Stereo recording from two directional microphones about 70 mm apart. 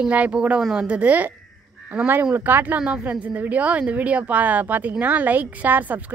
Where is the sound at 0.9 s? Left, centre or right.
Centre.